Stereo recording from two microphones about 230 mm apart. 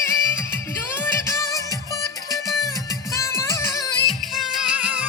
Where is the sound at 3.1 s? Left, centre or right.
Centre.